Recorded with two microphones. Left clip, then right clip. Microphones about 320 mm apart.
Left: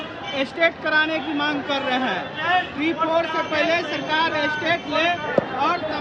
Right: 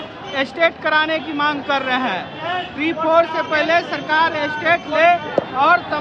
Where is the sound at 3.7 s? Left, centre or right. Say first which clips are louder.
Right 5 dB; centre.